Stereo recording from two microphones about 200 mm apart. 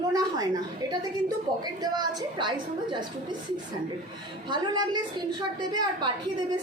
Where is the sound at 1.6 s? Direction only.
20° right (ahead or behind).